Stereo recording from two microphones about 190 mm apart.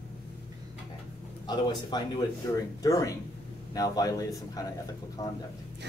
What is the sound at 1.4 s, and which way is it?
Speech, 20° left (ahead or behind).